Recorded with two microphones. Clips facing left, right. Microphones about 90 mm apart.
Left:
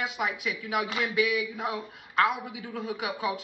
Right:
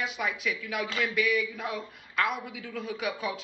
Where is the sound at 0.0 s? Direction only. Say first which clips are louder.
Left 1 dB; 20° left (ahead or behind).